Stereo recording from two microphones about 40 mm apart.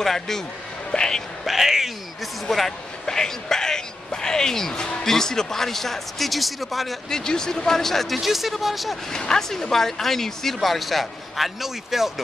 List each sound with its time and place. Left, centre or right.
0.0 s speech: centre
1.4 s speech: centre
2.4 s speech: centre
7.1 s speech: centre
9.4 s speech: centre